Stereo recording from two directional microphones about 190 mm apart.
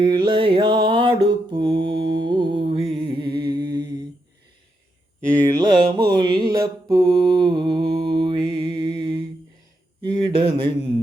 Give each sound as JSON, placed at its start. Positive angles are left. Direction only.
{"t": 0.0, "sound": "mantra", "side_deg": -25}
{"t": 2.9, "sound": "music", "side_deg": -25}
{"t": 3.7, "sound": "mantra", "side_deg": -20}
{"t": 5.4, "sound": "mantra", "side_deg": -20}
{"t": 10.0, "sound": "a sound", "side_deg": -25}